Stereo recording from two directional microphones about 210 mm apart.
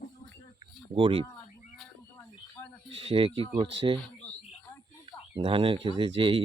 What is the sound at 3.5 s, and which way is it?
Speech, 25° right (ahead or behind).